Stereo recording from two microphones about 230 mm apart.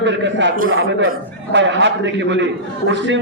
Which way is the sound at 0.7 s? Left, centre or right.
Right.